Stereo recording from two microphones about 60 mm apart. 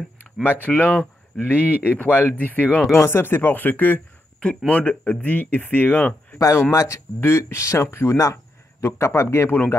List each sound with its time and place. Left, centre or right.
0.4 s speech: left
2.9 s speech: left
6.3 s speech: left
7.2 s speech: left